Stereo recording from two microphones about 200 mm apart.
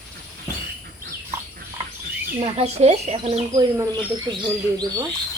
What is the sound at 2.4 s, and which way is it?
Speech, 30° right (ahead or behind).